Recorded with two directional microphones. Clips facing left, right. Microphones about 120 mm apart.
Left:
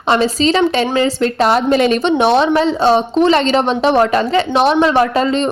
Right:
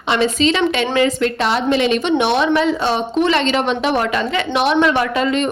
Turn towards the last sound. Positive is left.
turn(degrees=30)  # may be behind; listen again after turning